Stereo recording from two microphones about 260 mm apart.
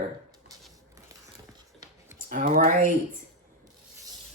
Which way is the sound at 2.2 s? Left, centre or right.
Right.